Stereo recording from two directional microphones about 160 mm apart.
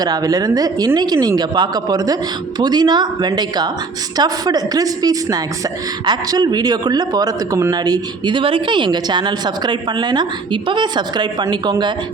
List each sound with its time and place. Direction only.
0.0 s speech: 25° right (ahead or behind)